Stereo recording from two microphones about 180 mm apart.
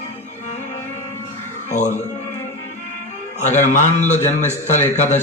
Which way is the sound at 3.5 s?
45° left (ahead or behind).